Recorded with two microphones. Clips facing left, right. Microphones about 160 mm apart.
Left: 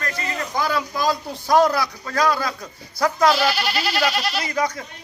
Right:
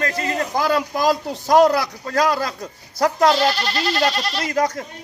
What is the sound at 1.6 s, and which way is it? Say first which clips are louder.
A man's voice: right 4 dB; 40° right (ahead or behind).